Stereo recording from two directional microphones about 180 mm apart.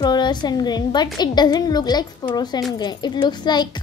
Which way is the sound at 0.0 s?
25° left (ahead or behind).